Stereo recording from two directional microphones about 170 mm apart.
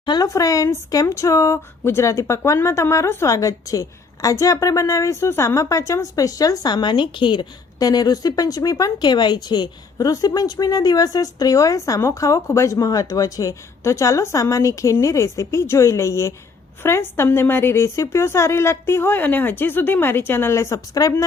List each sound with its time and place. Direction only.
0.0 s a woman's voice: 25° left (ahead or behind)